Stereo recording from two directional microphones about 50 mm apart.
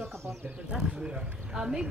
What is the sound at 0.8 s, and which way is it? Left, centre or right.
Speech, centre.